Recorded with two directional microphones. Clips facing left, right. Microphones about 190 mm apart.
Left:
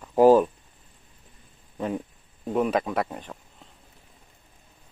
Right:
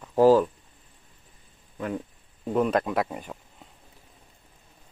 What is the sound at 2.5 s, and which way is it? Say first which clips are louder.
Speech: even; 5° left (ahead or behind).